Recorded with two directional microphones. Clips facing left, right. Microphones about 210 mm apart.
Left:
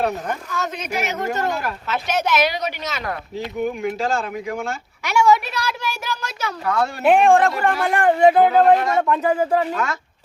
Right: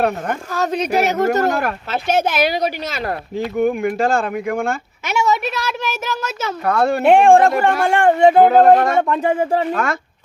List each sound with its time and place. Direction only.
0.5 s a woman's voice: 35° right (ahead or behind)
1.5 s speech: 55° right (ahead or behind)
1.9 s a woman's voice: 30° right (ahead or behind)
3.6 s speech: 55° right (ahead or behind)
5.0 s speech: 20° right (ahead or behind)
6.7 s speech: 60° right (ahead or behind)
7.0 s a woman's voice: 30° right (ahead or behind)
8.4 s speech: 50° right (ahead or behind)
9.2 s speech: 25° right (ahead or behind)
9.7 s speech: 55° right (ahead or behind)